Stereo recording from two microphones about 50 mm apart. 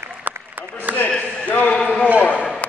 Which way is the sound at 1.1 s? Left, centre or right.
Left.